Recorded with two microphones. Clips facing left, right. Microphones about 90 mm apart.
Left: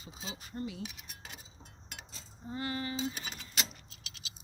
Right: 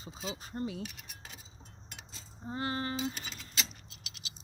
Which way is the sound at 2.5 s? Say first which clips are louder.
Right 2 dB; 35° right (ahead or behind).